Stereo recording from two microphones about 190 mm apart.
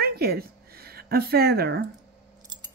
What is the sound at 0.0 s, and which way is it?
Speech, 55° right (ahead or behind).